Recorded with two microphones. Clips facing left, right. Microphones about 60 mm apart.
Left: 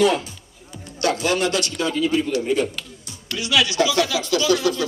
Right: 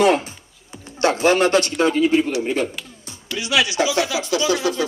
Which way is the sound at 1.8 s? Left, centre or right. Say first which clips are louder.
Right 3 dB; right.